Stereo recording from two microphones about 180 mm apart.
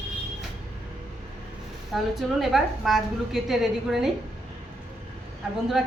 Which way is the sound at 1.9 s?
Centre (ahead or behind).